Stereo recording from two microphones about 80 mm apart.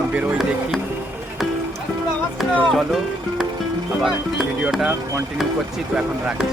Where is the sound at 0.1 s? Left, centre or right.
Centre.